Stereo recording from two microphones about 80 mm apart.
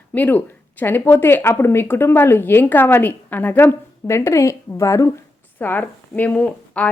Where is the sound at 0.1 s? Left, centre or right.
Left.